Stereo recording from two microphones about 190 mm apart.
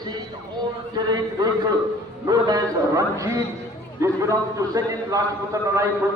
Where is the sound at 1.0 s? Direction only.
20° right (ahead or behind).